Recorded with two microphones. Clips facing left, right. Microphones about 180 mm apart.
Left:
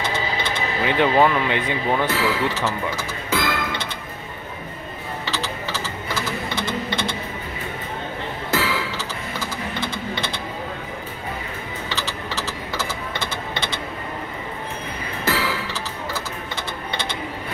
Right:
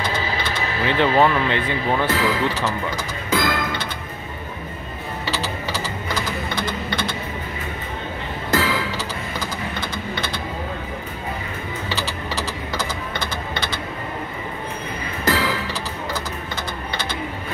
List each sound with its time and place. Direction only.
0.8 s speech: 15° left (ahead or behind)
3.3 s music: 5° left (ahead or behind)
5.2 s typing: 10° right (ahead or behind)
6.9 s typing: 25° left (ahead or behind)
8.5 s music: 5° left (ahead or behind)
9.8 s a sound: 25° left (ahead or behind)
11.9 s a sound: 15° right (ahead or behind)
15.2 s music: 5° left (ahead or behind)